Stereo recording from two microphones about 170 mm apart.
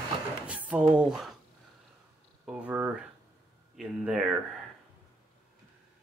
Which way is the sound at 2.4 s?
10° right (ahead or behind).